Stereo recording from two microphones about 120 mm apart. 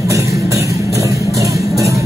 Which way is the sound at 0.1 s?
25° right (ahead or behind).